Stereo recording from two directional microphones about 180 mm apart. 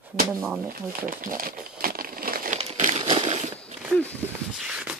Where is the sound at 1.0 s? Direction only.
50° right (ahead or behind).